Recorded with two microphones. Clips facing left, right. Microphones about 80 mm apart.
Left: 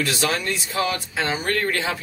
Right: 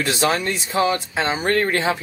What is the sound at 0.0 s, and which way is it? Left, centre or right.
Speech, right.